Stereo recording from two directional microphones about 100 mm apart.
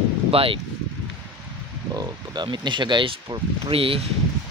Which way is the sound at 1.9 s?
45° right (ahead or behind).